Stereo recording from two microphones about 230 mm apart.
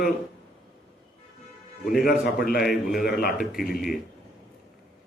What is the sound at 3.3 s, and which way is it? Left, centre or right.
Speech, centre.